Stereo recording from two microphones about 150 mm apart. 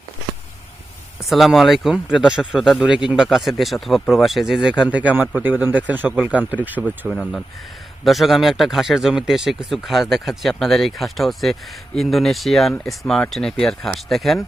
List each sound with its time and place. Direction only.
1.2 s speech: centre (ahead or behind)
7.1 s speech: centre (ahead or behind)